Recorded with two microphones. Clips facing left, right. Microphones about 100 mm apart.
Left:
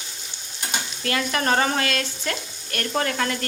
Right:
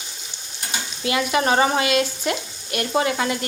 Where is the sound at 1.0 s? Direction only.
15° right (ahead or behind).